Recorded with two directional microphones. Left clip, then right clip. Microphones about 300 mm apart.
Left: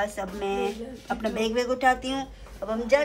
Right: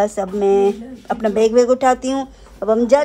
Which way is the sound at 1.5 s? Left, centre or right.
Centre.